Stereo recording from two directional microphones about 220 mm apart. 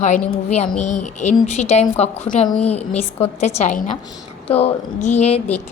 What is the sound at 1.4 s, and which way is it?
A woman's voice, 30° left (ahead or behind).